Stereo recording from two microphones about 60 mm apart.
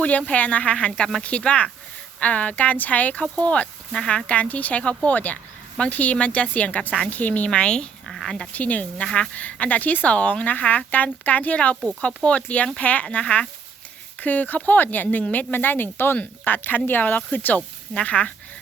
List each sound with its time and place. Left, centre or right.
0.0 s speech: centre
4.3 s speech: left
8.0 s a sound: centre
8.5 s speech: left
9.0 s speech: centre
9.3 s speech: left